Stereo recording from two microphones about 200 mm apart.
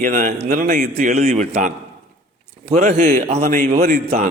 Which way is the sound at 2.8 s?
40° right (ahead or behind).